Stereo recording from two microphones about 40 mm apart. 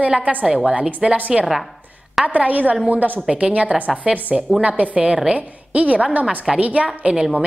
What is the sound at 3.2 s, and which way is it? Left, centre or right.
A woman's voice, right.